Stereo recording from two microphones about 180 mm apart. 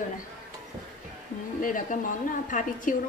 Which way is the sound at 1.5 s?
50° left (ahead or behind).